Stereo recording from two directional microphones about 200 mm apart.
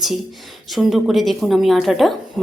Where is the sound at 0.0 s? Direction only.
Centre (ahead or behind).